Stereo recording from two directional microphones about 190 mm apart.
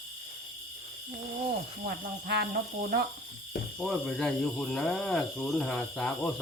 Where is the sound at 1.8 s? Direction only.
55° right (ahead or behind).